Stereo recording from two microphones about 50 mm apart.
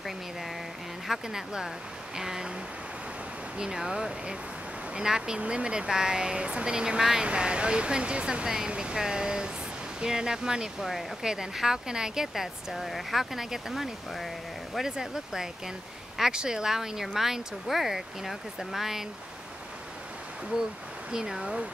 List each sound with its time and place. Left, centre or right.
1.0 s speech: centre
3.5 s speech: centre
14.9 s speech: centre
21.1 s speech: centre